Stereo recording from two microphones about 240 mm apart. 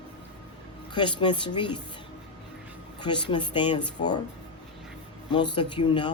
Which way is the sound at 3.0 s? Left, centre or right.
Centre.